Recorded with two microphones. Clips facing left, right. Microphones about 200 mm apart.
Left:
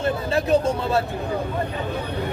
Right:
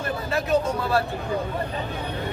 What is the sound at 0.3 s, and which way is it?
Speech, 25° left (ahead or behind).